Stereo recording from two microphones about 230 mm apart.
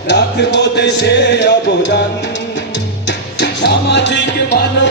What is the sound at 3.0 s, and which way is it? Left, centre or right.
Music, left.